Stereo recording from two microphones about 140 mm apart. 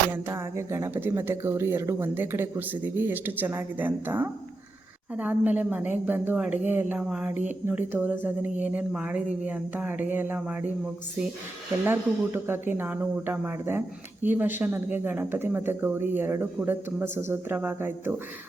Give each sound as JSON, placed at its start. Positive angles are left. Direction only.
{"t": 0.1, "sound": "speech", "side_deg": -20}
{"t": 11.9, "sound": "speech", "side_deg": -15}